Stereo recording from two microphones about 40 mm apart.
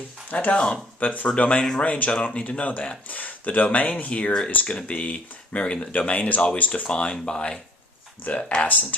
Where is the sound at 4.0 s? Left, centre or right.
Left.